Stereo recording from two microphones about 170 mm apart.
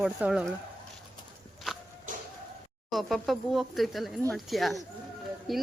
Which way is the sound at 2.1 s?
50° right (ahead or behind).